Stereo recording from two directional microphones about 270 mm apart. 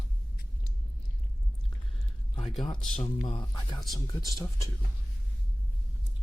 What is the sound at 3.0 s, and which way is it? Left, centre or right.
Speech, left.